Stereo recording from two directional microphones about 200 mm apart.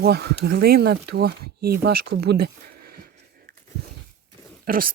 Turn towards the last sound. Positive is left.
turn(degrees=-45)  # may be behind; listen again after turning